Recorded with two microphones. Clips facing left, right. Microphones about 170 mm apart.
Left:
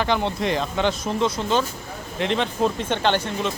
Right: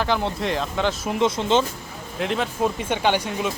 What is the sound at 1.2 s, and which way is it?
Speech, 20° right (ahead or behind).